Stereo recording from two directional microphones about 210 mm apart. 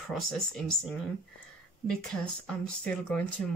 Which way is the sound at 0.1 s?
Centre (ahead or behind).